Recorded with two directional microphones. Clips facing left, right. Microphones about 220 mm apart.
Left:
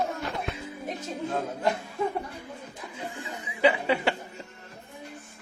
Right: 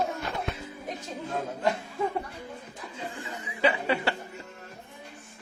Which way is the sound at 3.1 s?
20° left (ahead or behind).